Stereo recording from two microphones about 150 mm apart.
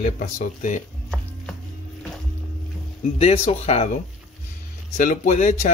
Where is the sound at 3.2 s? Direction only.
45° left (ahead or behind).